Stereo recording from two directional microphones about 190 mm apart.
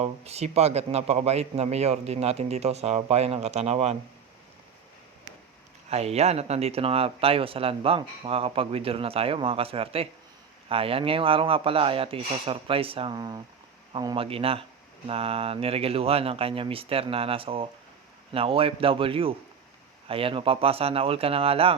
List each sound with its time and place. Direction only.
0.0 s speech: 35° right (ahead or behind)
5.9 s speech: 35° right (ahead or behind)